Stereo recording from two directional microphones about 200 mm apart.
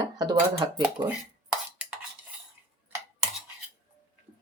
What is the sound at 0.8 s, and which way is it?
Speech, 10° right (ahead or behind).